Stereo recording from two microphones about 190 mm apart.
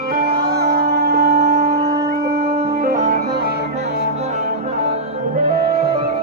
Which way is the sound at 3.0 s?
45° right (ahead or behind).